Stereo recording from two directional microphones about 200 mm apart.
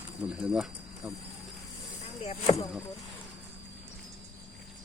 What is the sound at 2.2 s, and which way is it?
Speech, 30° left (ahead or behind).